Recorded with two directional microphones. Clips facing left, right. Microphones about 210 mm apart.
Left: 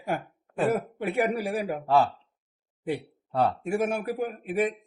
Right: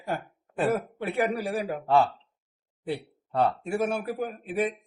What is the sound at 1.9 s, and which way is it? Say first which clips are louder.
Speech: even; centre (ahead or behind).